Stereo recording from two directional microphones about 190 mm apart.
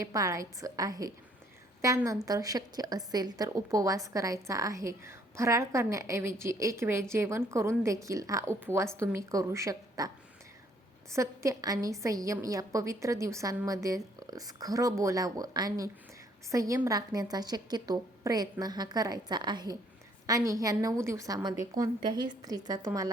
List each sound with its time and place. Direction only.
0.0 s a woman's voice: 15° right (ahead or behind)
11.1 s a woman's voice: 15° right (ahead or behind)